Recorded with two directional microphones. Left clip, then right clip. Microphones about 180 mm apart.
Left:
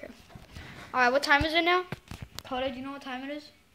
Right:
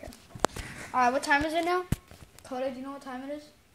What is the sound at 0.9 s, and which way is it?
Speech, 10° left (ahead or behind).